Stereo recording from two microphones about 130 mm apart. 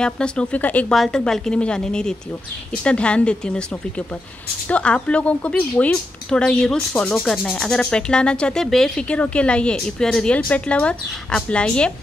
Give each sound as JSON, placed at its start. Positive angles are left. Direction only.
{"t": 0.0, "sound": "a woman's voice", "side_deg": 5}
{"t": 4.6, "sound": "a woman's voice", "side_deg": 10}